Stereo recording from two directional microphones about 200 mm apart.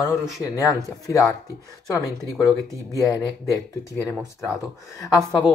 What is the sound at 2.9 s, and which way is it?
Speech, 20° left (ahead or behind).